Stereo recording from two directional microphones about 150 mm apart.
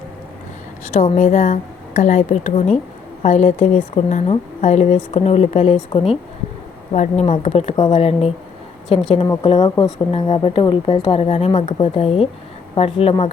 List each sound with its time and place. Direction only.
0.9 s a woman's voice: 55° left (ahead or behind)
3.9 s a woman's voice: 45° left (ahead or behind)
6.9 s a woman's voice: 50° left (ahead or behind)